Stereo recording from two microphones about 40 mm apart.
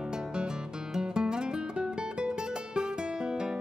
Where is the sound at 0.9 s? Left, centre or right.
Centre.